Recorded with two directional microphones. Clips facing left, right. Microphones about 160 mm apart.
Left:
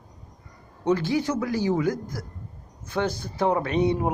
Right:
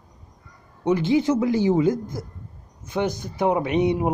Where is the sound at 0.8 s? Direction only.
20° right (ahead or behind).